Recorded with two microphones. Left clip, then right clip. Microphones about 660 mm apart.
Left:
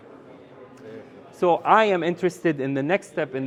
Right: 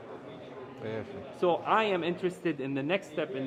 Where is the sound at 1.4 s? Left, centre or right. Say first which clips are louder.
Left 9 dB; left.